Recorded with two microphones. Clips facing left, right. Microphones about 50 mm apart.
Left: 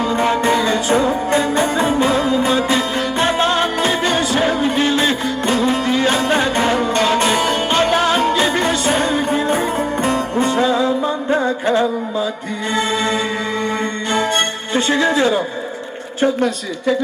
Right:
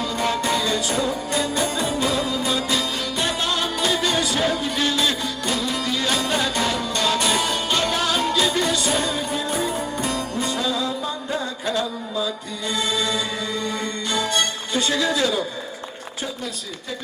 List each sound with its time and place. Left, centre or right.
0.0 s music: left
16.2 s speech: left